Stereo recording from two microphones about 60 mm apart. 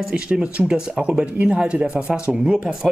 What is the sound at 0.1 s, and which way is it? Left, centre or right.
Speech, centre.